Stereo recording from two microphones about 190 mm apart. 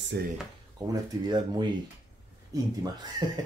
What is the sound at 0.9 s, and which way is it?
Speech, 25° right (ahead or behind).